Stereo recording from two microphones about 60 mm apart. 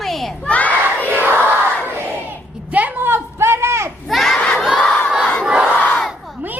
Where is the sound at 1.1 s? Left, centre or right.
Right.